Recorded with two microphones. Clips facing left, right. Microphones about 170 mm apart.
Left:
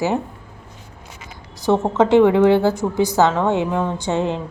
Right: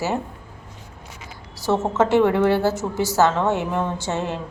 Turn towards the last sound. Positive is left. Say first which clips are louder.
# left 5 dB
turn(degrees=15)  # may be behind; listen again after turning